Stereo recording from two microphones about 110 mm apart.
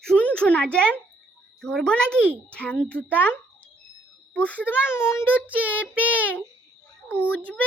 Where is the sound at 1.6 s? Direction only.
10° left (ahead or behind).